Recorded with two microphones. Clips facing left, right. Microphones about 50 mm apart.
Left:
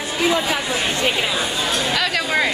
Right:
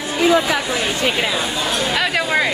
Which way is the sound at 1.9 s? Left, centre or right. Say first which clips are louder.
Right 3 dB; centre.